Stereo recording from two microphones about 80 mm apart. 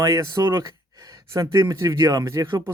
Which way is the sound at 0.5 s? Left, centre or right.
Right.